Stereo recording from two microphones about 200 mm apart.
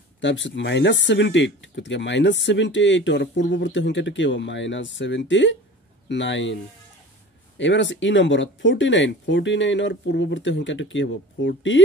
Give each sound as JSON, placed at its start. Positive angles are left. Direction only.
{"t": 0.2, "sound": "speech", "side_deg": 65}